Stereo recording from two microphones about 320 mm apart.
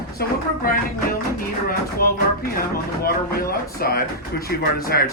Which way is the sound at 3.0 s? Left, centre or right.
Left.